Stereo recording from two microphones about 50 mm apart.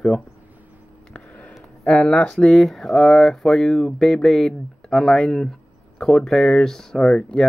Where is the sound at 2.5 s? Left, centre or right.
Centre.